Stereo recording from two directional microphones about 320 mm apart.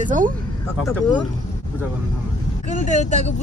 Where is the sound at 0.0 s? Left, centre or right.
Right.